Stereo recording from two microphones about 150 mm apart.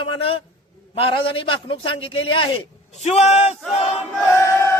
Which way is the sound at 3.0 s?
45° left (ahead or behind).